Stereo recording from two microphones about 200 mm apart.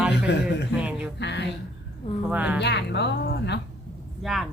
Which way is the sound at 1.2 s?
55° left (ahead or behind).